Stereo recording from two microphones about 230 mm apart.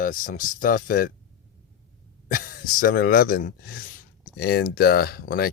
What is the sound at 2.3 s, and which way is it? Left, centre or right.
Speech, left.